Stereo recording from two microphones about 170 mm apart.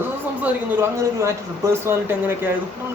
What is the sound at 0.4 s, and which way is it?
Speech, 15° right (ahead or behind).